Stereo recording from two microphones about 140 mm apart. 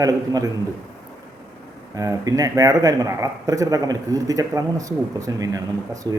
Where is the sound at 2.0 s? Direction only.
25° right (ahead or behind).